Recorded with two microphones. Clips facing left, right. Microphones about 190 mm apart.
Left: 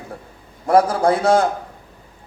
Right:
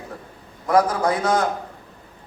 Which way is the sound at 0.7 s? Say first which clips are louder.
Left 3 dB; 30° left (ahead or behind).